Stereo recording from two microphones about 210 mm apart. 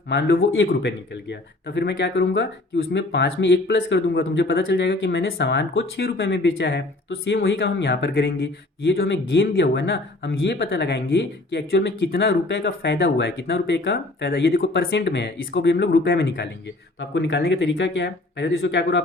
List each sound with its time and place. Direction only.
0.1 s speech: 50° left (ahead or behind)
14.6 s speech: 60° left (ahead or behind)